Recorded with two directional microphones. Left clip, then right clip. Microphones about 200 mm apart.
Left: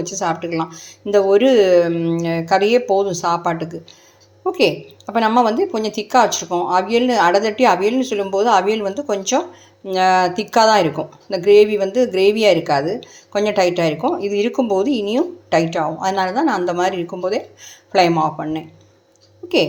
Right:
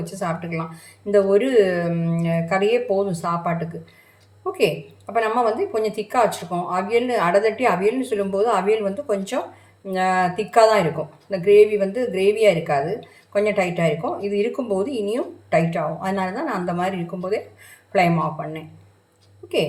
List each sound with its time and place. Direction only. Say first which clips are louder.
0.0 s speech: left 6 dB; 35° left (ahead or behind)
5.1 s speech: left 5 dB; 40° left (ahead or behind)